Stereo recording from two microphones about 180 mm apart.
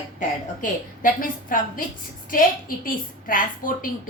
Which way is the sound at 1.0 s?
50° left (ahead or behind).